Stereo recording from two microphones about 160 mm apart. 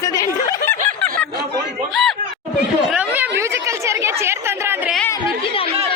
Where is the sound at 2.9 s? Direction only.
10° right (ahead or behind).